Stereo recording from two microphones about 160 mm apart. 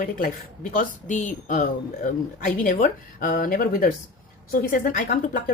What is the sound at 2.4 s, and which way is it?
Speech, 60° left (ahead or behind).